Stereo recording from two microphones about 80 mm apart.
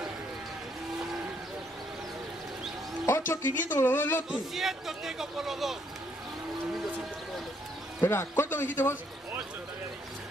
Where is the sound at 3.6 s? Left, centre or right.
Left.